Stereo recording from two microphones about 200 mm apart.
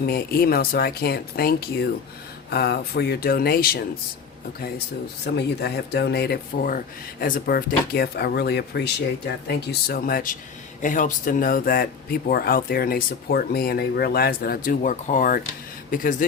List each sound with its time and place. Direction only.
0.0 s speech: 50° left (ahead or behind)
5.2 s speech: 55° left (ahead or behind)